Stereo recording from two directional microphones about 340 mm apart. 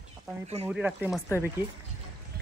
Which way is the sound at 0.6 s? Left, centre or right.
Centre.